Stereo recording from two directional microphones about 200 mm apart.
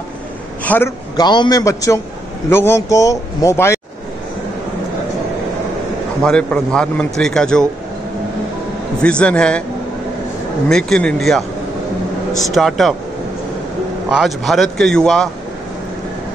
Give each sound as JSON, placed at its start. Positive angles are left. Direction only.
{"t": 0.7, "sound": "a man's voice", "side_deg": 10}
{"t": 6.2, "sound": "a man's voice", "side_deg": 5}
{"t": 9.0, "sound": "a man's voice", "side_deg": 5}
{"t": 10.7, "sound": "a man's voice", "side_deg": 5}
{"t": 12.4, "sound": "a man's voice", "side_deg": 0}
{"t": 14.1, "sound": "a man's voice", "side_deg": 0}